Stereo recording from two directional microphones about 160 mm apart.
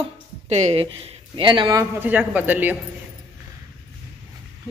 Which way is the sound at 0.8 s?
30° right (ahead or behind).